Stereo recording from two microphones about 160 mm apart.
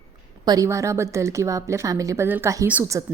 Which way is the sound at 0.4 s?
20° right (ahead or behind).